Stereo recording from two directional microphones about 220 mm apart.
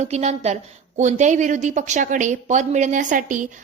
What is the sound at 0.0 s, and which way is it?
A woman's voice, 30° right (ahead or behind).